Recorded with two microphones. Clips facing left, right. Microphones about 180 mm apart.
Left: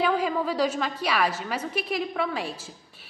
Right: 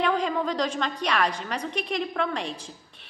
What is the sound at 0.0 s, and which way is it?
A woman's voice, 5° left (ahead or behind).